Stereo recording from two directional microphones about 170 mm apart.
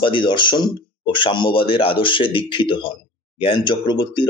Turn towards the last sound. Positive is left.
turn(degrees=30)  # may be behind; listen again after turning